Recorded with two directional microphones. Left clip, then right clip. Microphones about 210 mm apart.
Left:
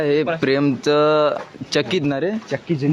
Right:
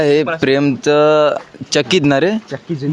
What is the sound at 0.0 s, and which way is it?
Speech, 20° right (ahead or behind).